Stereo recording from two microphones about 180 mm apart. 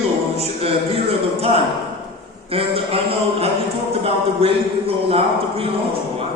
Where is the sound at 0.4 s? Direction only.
35° right (ahead or behind).